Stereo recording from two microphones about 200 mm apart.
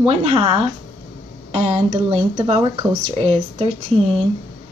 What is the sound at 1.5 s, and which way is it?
Speech, 30° right (ahead or behind).